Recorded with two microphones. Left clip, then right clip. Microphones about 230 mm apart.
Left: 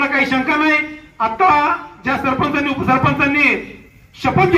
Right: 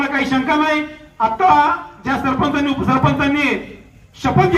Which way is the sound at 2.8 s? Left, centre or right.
Left.